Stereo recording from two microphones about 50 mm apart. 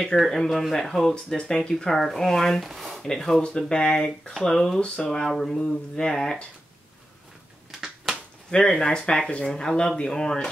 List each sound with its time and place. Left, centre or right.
0.2 s speech: centre
2.6 s speech: centre
3.0 s speech: centre
4.7 s speech: left
5.0 s speech: centre
7.8 s a sound: centre
8.5 s speech: centre